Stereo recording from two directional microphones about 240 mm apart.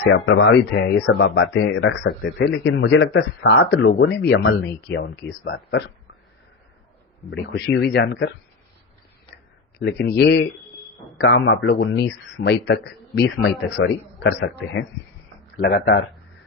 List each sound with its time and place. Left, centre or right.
0.0 s speech: left
7.3 s speech: left
9.7 s speech: left